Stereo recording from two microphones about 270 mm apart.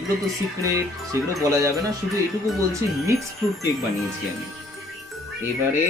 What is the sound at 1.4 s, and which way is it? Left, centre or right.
Speech, centre.